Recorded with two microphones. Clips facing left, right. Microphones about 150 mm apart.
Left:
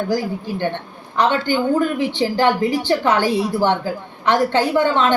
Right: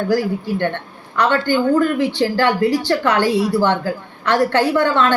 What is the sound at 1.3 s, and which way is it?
A woman's voice, 15° left (ahead or behind).